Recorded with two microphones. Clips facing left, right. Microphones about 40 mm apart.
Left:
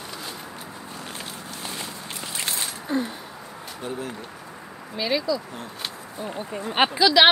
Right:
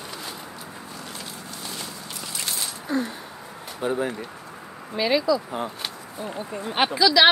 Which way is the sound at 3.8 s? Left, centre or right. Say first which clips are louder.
Right 7 dB; right.